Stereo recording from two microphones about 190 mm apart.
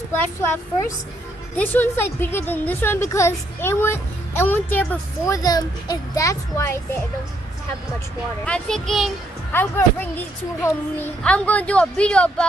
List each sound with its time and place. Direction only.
0.1 s a woman's voice: 15° left (ahead or behind)
8.5 s a child's voice: 5° left (ahead or behind)